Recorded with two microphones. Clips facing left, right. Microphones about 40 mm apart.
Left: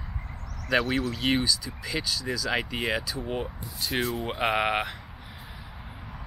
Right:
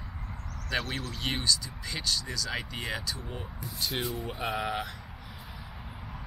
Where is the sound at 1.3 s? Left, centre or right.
Centre.